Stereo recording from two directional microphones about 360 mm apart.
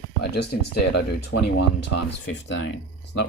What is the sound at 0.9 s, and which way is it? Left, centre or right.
Speech, left.